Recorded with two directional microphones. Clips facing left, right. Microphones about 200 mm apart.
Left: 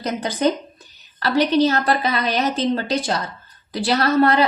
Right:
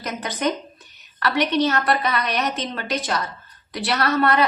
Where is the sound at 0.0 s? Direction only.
30° left (ahead or behind).